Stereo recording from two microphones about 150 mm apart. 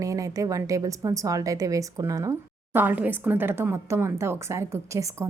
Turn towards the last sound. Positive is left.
turn(degrees=-20)  # may be behind; listen again after turning